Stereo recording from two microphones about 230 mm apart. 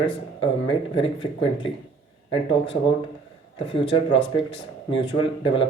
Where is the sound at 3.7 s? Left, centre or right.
Left.